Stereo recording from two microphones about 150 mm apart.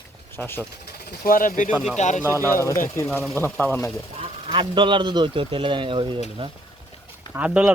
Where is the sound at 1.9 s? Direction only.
50° left (ahead or behind).